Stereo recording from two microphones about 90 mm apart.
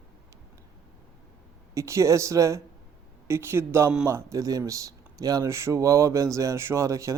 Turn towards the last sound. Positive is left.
turn(degrees=-35)  # may be behind; listen again after turning